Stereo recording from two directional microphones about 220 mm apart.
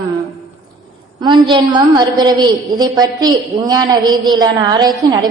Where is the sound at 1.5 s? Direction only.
20° right (ahead or behind).